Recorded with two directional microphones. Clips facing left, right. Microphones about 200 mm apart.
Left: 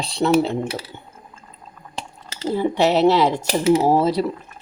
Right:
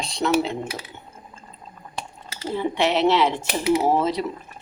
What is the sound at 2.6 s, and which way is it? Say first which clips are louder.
Speech: left 4 dB; 40° left (ahead or behind).